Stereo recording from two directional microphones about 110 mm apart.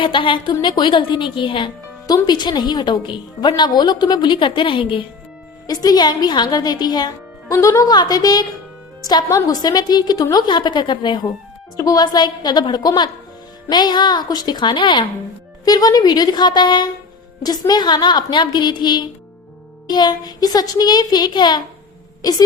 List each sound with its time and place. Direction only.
0.0 s a woman's voice: 50° left (ahead or behind)
5.6 s a woman's voice: 35° left (ahead or behind)
15.6 s a woman's voice: 35° left (ahead or behind)